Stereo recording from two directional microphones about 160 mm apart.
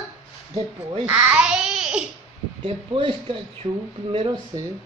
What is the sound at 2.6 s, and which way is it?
Speech, 30° right (ahead or behind).